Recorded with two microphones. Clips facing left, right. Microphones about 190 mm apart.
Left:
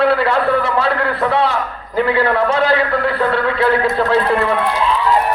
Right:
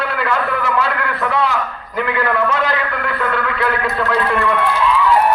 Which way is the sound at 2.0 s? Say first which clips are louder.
Left 4 dB; 30° left (ahead or behind).